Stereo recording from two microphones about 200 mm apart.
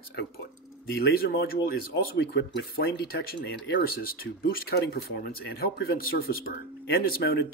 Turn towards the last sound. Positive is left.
turn(degrees=50)  # may be behind; listen again after turning